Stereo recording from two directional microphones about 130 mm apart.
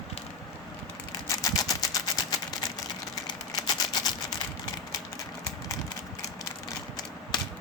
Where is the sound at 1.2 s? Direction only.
25° left (ahead or behind).